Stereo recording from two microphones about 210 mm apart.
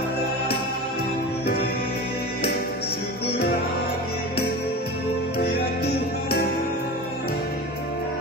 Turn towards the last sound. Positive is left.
turn(degrees=45)  # may be behind; listen again after turning